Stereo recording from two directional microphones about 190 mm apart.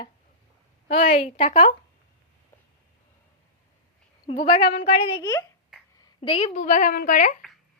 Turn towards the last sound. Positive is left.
turn(degrees=45)  # may be behind; listen again after turning